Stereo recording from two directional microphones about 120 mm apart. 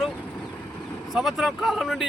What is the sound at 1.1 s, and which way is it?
Speech, centre (ahead or behind).